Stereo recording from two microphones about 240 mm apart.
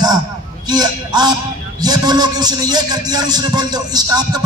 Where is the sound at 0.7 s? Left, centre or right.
Centre.